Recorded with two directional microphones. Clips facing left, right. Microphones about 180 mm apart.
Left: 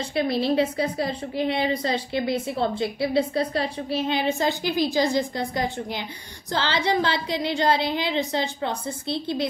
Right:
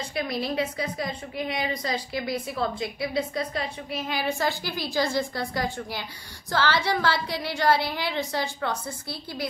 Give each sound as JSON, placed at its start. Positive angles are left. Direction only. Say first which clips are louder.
{"t": 0.1, "sound": "a woman's voice", "louder": "left 7 dB", "side_deg": 30}